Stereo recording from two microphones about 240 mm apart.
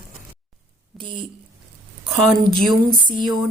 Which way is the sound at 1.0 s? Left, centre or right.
Centre.